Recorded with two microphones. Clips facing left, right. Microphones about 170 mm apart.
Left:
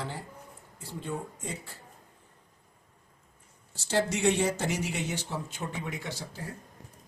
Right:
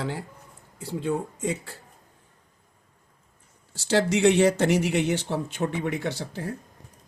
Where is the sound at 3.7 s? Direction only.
80° right; by 6.5 s 65° right (ahead or behind).